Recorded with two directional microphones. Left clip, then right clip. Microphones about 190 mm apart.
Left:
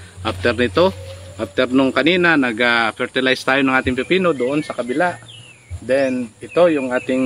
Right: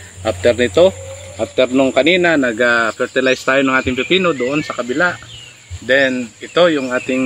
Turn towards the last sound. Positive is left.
turn(degrees=-30)  # may be behind; listen again after turning